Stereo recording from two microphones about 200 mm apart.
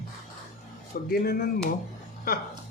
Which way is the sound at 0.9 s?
50° left (ahead or behind).